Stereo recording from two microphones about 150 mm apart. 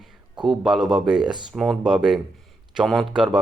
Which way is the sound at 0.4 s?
5° right (ahead or behind).